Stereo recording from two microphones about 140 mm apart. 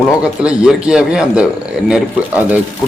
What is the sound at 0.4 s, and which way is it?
A man's voice, 5° right (ahead or behind).